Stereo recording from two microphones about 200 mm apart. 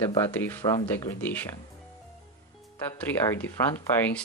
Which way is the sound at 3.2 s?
10° left (ahead or behind).